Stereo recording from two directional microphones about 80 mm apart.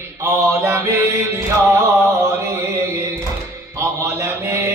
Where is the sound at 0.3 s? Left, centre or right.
Right.